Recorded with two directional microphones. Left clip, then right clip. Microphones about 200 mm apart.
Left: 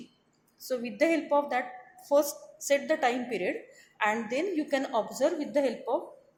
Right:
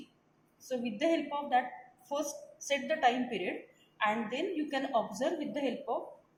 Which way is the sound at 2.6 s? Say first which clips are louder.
Left 3 dB; 60° left (ahead or behind).